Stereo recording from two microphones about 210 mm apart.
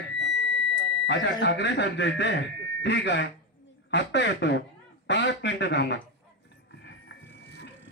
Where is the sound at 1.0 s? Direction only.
60° left (ahead or behind).